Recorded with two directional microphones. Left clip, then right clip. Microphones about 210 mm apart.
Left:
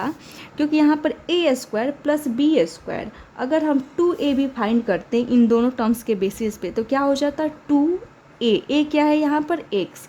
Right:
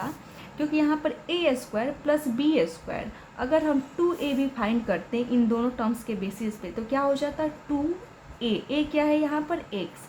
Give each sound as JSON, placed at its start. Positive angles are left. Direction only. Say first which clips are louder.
{"t": 0.5, "sound": "a woman's voice", "louder": "left 7 dB", "side_deg": 45}